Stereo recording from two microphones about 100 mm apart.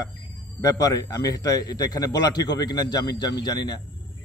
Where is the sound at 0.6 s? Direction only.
35° left (ahead or behind).